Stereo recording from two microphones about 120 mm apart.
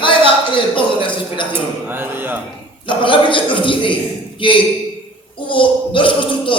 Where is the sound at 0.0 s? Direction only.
45° left (ahead or behind).